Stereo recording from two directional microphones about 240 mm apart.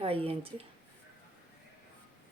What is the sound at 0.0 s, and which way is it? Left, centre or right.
Speech, right.